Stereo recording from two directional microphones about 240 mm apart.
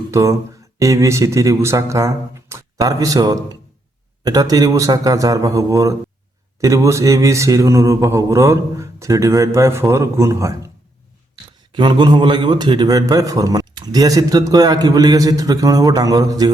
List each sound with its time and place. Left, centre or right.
0.1 s a sound: centre
0.8 s a man's voice: centre
11.7 s a man's voice: centre